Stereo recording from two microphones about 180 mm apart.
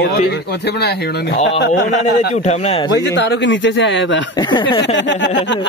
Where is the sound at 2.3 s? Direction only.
40° left (ahead or behind).